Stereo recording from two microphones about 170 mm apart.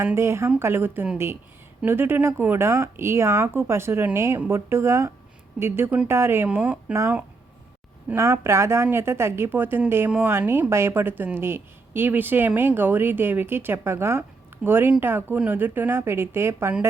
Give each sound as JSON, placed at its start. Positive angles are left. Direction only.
{"t": 0.0, "sound": "speech", "side_deg": -15}